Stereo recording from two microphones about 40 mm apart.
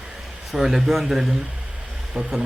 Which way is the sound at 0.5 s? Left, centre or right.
Centre.